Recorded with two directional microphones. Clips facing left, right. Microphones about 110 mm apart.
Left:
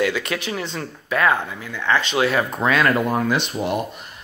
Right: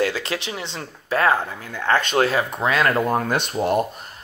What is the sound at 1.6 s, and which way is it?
Speech, 45° right (ahead or behind).